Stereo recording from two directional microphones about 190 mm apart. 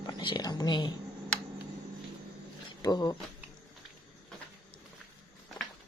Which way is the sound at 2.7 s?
20° left (ahead or behind).